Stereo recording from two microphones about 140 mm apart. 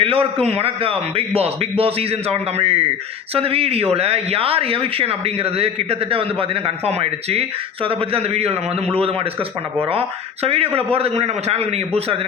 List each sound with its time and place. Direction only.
0.0 s a man's voice: 40° right (ahead or behind)
10.4 s speech: 45° right (ahead or behind)